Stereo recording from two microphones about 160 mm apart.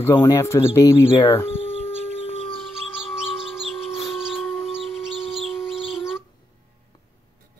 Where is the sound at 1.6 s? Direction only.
45° right (ahead or behind).